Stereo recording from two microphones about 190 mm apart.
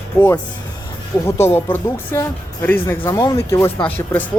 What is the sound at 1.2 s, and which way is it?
Speech, 10° left (ahead or behind).